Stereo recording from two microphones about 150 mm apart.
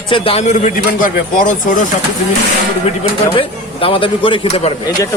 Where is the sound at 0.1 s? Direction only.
40° left (ahead or behind); by 1.7 s 60° left (ahead or behind).